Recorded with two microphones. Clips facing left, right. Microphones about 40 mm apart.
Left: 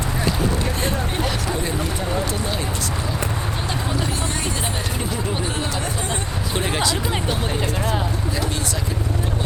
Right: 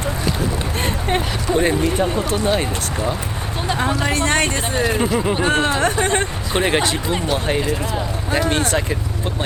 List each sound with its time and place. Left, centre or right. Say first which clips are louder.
1.1 s speech: right 4 dB; right
4.0 s speech: right 7 dB; right
6.5 s speech: right 4 dB; right